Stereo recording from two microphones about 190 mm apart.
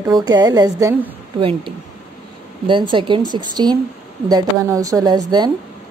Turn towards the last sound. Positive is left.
turn(degrees=-20)  # may be behind; listen again after turning